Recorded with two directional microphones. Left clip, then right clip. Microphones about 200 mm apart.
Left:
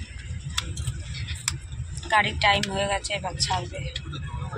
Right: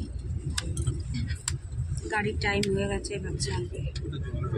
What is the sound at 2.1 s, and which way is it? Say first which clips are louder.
Speech: left 8 dB; 5° left (ahead or behind).